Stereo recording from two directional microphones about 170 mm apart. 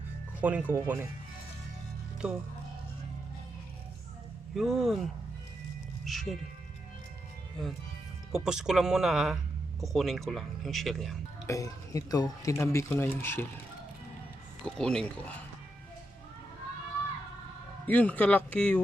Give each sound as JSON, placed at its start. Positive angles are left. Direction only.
{"t": 0.4, "sound": "speech", "side_deg": -10}
{"t": 2.2, "sound": "speech", "side_deg": -5}
{"t": 4.5, "sound": "speech", "side_deg": 0}
{"t": 6.1, "sound": "music", "side_deg": 0}
{"t": 8.3, "sound": "speech", "side_deg": -5}
{"t": 11.4, "sound": "speech", "side_deg": 20}
{"t": 14.6, "sound": "speech", "side_deg": 5}
{"t": 17.8, "sound": "speech", "side_deg": 10}